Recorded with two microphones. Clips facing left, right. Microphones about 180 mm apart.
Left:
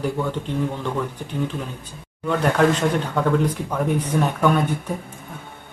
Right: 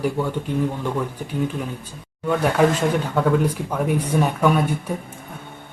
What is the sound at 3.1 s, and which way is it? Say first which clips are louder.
Speech: right 1 dB; 10° right (ahead or behind).